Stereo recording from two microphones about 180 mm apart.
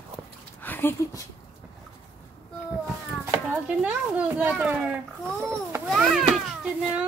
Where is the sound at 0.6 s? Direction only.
10° left (ahead or behind).